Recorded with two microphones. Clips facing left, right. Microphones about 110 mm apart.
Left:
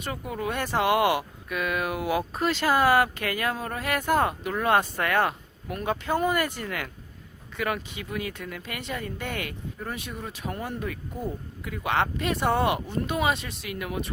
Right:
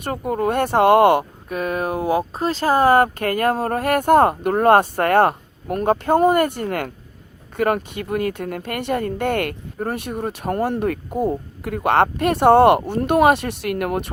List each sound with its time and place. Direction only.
0.0 s speech: 50° right (ahead or behind)